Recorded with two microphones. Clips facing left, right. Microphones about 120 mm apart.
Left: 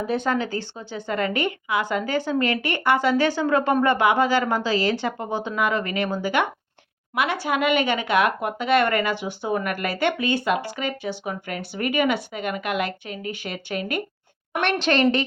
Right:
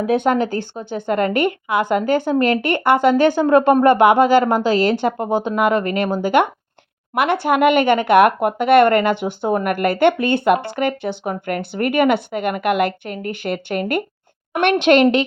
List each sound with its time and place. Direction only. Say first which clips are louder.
0.0 s a woman's voice: right 7 dB; 65° right (ahead or behind)